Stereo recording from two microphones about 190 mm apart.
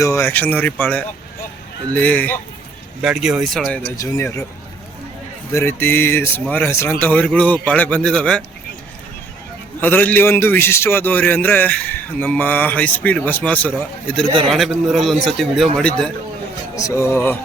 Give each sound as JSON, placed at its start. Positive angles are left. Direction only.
{"t": 0.0, "sound": "a man's voice", "side_deg": 15}
{"t": 3.0, "sound": "a man's voice", "side_deg": 0}
{"t": 3.9, "sound": "a man's voice", "side_deg": 15}
{"t": 5.5, "sound": "a man's voice", "side_deg": 15}
{"t": 9.8, "sound": "a man's voice", "side_deg": 10}
{"t": 16.7, "sound": "a man's voice", "side_deg": 15}